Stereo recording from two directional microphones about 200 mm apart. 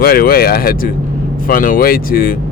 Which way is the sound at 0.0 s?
50° left (ahead or behind).